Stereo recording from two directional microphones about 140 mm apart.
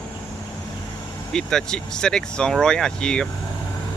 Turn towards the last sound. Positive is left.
turn(degrees=5)  # may be behind; listen again after turning